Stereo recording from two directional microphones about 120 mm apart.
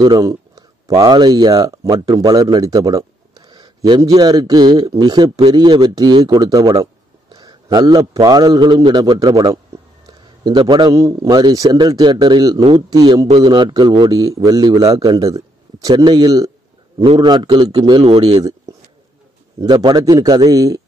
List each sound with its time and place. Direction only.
0.0 s a man's voice: 30° right (ahead or behind)
15.9 s a man's voice: 40° right (ahead or behind)
18.0 s speech: 50° right (ahead or behind)
19.6 s a man's voice: 35° right (ahead or behind)